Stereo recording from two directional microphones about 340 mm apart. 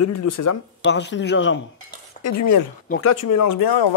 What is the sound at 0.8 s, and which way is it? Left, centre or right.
Speech, left.